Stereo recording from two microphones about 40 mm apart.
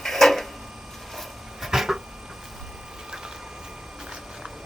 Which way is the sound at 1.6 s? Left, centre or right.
Centre.